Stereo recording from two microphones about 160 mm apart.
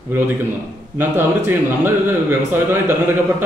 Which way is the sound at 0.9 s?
15° right (ahead or behind).